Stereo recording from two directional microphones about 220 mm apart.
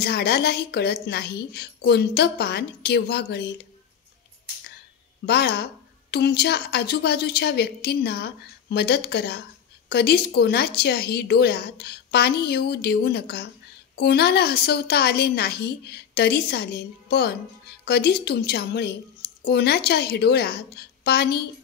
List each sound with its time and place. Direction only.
0.0 s a woman's voice: 45° left (ahead or behind)
5.2 s a woman's voice: 45° left (ahead or behind)